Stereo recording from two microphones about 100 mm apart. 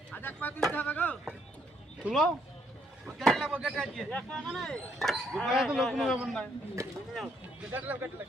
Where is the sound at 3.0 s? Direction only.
5° left (ahead or behind).